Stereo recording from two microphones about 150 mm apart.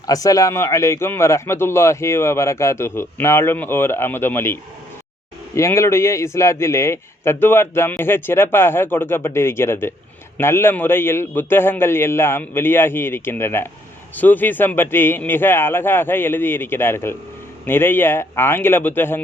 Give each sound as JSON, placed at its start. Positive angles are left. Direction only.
{"t": 0.1, "sound": "a man's voice", "side_deg": 25}
{"t": 5.5, "sound": "a man's voice", "side_deg": 20}